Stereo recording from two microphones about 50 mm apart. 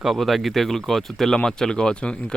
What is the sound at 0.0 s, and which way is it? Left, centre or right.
Speech, centre.